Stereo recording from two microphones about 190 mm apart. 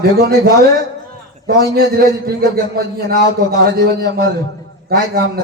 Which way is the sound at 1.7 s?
55° right (ahead or behind).